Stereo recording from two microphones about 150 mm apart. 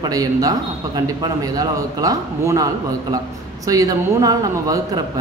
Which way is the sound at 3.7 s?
25° right (ahead or behind).